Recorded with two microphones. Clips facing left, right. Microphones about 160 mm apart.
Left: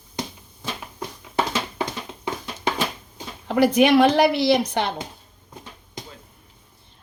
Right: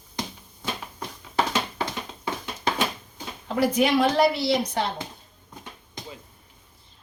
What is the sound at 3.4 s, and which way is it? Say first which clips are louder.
Speech: left 5 dB; 70° left (ahead or behind).